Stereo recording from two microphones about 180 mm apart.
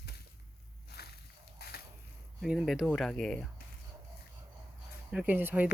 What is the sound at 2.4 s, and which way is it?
Speech, 5° right (ahead or behind).